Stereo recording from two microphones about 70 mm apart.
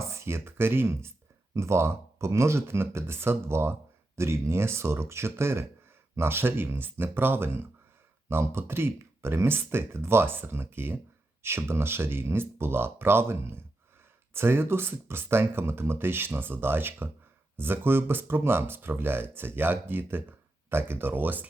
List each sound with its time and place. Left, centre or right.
0.0 s speech: right